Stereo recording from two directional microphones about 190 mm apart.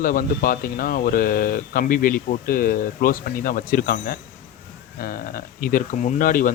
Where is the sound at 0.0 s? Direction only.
45° left (ahead or behind).